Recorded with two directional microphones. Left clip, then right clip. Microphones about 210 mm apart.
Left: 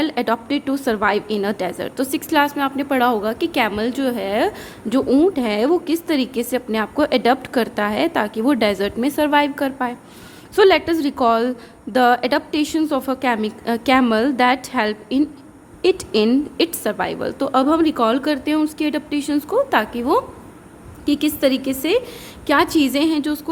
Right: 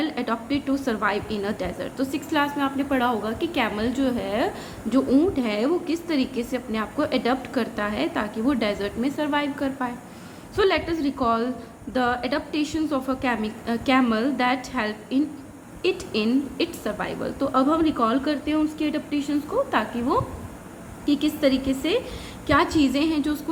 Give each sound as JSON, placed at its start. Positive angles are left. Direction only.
{"t": 0.0, "sound": "a woman's voice", "side_deg": 45}